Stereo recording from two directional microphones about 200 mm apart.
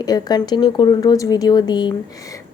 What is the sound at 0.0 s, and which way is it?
A woman's voice, 20° left (ahead or behind).